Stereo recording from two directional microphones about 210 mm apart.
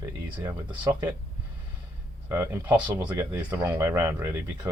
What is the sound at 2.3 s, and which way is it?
Speech, 10° right (ahead or behind).